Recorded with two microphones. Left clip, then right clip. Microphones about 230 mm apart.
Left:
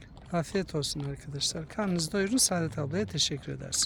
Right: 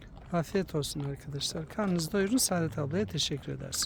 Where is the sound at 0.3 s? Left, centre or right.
Centre.